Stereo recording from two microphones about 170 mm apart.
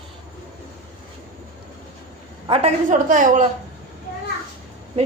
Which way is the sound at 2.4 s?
35° right (ahead or behind).